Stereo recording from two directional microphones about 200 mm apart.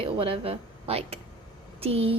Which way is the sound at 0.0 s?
30° right (ahead or behind).